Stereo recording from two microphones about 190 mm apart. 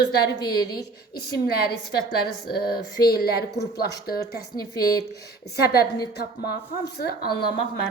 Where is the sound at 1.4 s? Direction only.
55° left (ahead or behind).